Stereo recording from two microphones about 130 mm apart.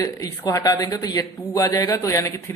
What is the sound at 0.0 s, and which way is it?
A man's voice, 25° left (ahead or behind).